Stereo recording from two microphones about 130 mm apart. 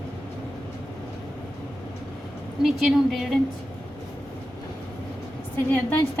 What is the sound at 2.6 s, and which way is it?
Speech, centre (ahead or behind).